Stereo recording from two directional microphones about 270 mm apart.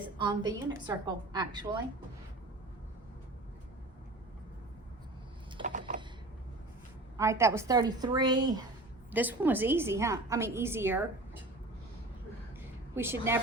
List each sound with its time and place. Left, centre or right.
0.2 s a woman's voice: centre
5.5 s a sound: right
7.2 s a woman's voice: centre
12.9 s a woman's voice: centre